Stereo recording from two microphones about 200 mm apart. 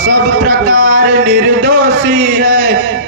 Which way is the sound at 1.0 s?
65° right (ahead or behind).